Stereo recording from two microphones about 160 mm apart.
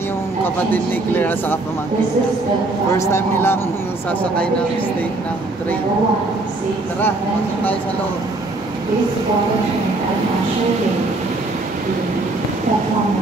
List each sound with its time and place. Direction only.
0.7 s speech: 10° left (ahead or behind)
3.0 s speech: 15° left (ahead or behind)